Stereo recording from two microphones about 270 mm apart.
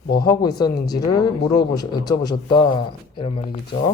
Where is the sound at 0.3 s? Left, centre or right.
Centre.